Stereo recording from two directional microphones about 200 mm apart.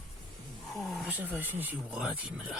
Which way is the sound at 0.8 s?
Centre (ahead or behind).